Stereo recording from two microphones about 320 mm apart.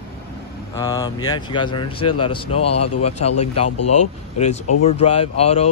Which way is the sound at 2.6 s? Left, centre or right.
Left.